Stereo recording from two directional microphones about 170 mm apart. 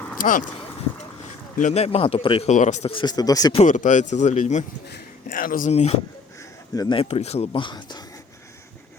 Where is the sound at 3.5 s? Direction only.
45° left (ahead or behind).